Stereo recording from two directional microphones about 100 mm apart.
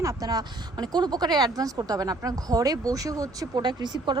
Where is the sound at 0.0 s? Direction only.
35° right (ahead or behind).